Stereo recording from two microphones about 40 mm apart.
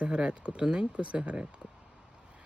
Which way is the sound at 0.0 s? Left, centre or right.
Right.